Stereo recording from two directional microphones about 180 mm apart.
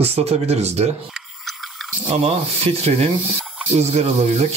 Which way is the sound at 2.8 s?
35° right (ahead or behind).